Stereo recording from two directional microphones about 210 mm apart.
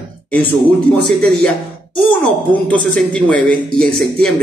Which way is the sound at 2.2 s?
5° left (ahead or behind).